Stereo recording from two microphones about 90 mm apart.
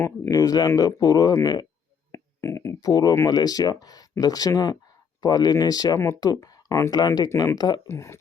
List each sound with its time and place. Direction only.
0.0 s speech: 40° left (ahead or behind)
2.1 s a sound: 30° left (ahead or behind)
2.9 s speech: 45° left (ahead or behind)
6.9 s speech: 50° left (ahead or behind)
7.3 s speech: 40° left (ahead or behind)
7.9 s speech: 30° left (ahead or behind)